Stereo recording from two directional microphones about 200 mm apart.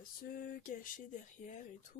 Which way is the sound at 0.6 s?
45° left (ahead or behind).